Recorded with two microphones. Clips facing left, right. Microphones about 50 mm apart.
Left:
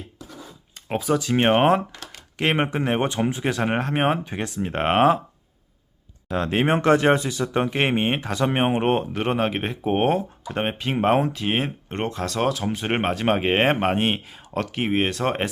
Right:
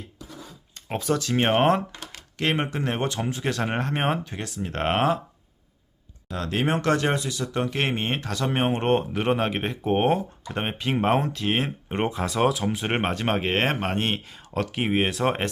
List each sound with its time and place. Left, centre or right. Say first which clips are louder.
0.9 s speech: left 3 dB; centre
2.4 s speech: left 3 dB; left
4.2 s speech: left 5 dB; left
4.7 s speech: left 5 dB; centre
6.3 s speech: left 4 dB; left; by 11.7 s centre
11.9 s speech: right 1 dB; centre